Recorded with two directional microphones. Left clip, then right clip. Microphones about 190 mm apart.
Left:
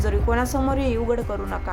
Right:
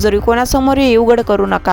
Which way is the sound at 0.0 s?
45° right (ahead or behind).